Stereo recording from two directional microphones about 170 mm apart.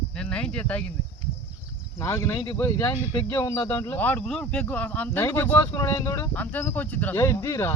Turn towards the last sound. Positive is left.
turn(degrees=15)  # may be behind; listen again after turning